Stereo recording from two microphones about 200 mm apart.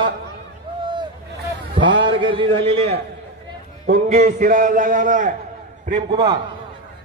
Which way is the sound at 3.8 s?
50° right (ahead or behind).